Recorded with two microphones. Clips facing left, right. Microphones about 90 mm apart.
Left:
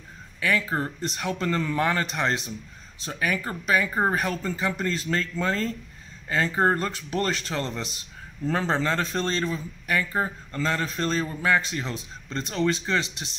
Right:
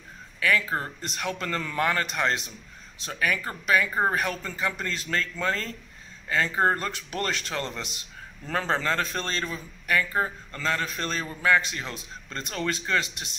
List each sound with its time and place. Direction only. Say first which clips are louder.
0.4 s a man's voice: even; 30° left (ahead or behind)